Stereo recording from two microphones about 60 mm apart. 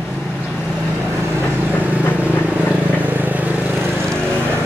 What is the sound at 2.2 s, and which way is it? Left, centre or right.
Vehicle, right.